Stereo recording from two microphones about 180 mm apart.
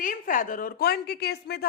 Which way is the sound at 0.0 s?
45° left (ahead or behind).